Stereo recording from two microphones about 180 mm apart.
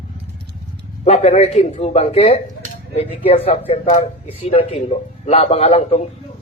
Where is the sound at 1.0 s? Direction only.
35° left (ahead or behind).